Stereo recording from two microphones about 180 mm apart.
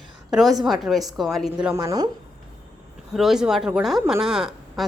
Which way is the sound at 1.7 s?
20° right (ahead or behind).